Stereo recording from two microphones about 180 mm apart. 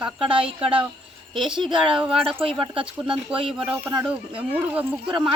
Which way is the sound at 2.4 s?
30° right (ahead or behind).